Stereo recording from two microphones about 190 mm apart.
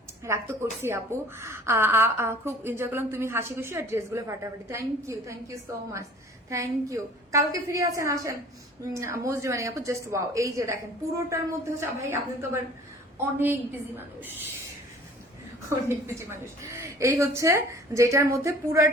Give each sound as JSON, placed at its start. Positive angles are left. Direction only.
{"t": 0.3, "sound": "a woman's voice", "side_deg": -15}
{"t": 13.1, "sound": "a woman's voice", "side_deg": -10}
{"t": 15.9, "sound": "a woman's voice", "side_deg": -15}